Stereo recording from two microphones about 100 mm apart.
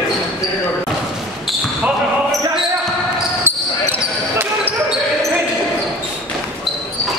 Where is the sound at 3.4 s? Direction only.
20° right (ahead or behind).